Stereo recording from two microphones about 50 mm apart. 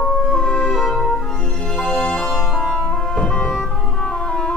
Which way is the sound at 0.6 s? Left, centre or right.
Centre.